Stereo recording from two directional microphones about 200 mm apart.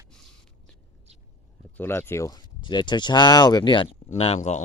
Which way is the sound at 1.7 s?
10° left (ahead or behind).